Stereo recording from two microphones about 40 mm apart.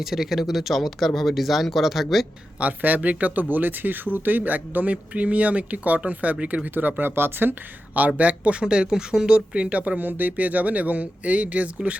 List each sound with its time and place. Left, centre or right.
0.0 s speech: centre
2.6 s speech: right
7.0 s speech: right
7.9 s speech: right
8.6 s speech: centre
10.0 s speech: right